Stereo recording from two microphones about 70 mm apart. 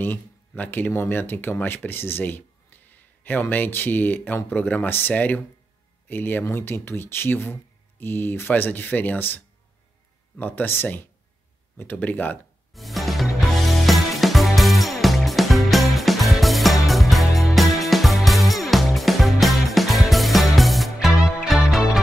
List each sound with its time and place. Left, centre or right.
0.0 s speech: left
12.7 s music: centre